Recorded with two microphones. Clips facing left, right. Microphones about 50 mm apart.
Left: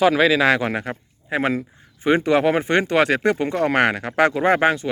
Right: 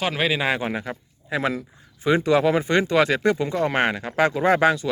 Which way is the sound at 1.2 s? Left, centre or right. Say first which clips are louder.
Left 3 dB; left.